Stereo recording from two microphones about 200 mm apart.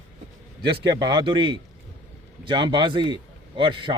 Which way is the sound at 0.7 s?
20° right (ahead or behind).